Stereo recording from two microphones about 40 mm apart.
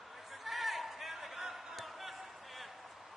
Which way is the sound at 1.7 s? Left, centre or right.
Centre.